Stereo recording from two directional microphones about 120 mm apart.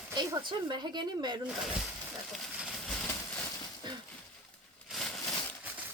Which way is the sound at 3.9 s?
40° right (ahead or behind).